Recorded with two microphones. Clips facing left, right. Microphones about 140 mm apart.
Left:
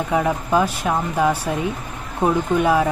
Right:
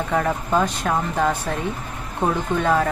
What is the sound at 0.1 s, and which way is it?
Speech, 10° left (ahead or behind).